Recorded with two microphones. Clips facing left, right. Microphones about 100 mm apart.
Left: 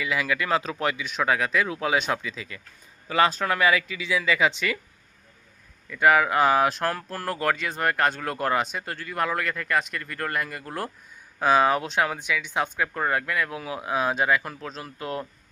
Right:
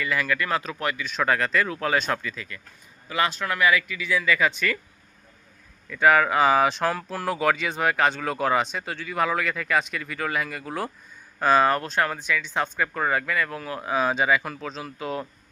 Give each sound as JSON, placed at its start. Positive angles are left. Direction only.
{"t": 0.0, "sound": "speech", "side_deg": 15}
{"t": 3.1, "sound": "speech", "side_deg": 35}
{"t": 5.9, "sound": "speech", "side_deg": 5}
{"t": 11.3, "sound": "speech", "side_deg": 10}